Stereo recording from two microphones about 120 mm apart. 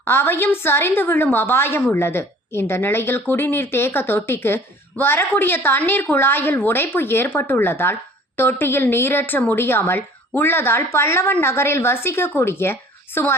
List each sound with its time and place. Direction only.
0.0 s a woman's voice: 20° left (ahead or behind)